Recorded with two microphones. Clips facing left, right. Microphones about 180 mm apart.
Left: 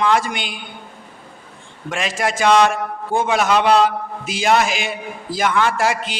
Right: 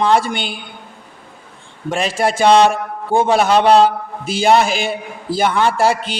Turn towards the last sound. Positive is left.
turn(degrees=-30)  # may be behind; listen again after turning